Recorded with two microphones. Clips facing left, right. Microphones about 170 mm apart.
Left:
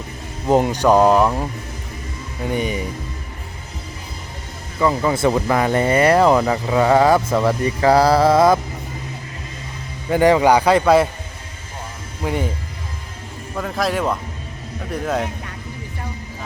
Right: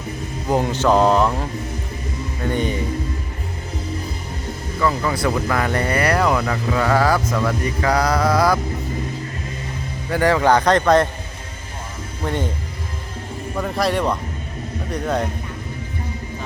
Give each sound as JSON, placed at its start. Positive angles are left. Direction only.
{"t": 0.4, "sound": "a man's voice", "side_deg": 20}
{"t": 4.8, "sound": "speech", "side_deg": 20}
{"t": 10.1, "sound": "a man's voice", "side_deg": 20}
{"t": 12.2, "sound": "a man's voice", "side_deg": 5}
{"t": 13.6, "sound": "speech", "side_deg": 0}